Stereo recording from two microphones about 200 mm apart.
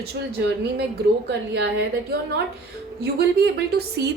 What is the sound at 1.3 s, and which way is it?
Speech, 60° right (ahead or behind).